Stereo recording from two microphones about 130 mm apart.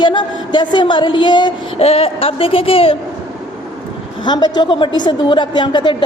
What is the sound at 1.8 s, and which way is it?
Speech, 50° left (ahead or behind).